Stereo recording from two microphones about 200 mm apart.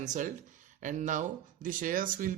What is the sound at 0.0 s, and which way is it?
A man's voice, 40° right (ahead or behind).